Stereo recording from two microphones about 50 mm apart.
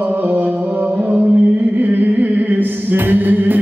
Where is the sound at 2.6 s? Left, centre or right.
Right.